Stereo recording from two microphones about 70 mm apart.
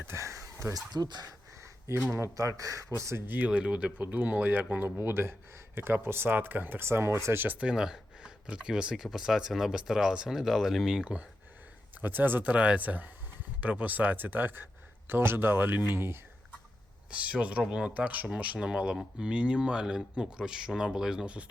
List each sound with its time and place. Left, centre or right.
0.1 s a sound: right
0.7 s speech: right
2.3 s speech: right
3.2 s speech: right
7.4 s speech: right
7.7 s speech: centre
11.9 s speech: right
17.1 s speech: centre